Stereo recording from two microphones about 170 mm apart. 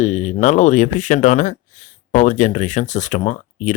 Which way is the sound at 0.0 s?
45° left (ahead or behind).